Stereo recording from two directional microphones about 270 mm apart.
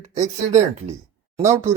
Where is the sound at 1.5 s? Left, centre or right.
Right.